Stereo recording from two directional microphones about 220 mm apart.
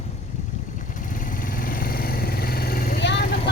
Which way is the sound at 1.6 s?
40° left (ahead or behind).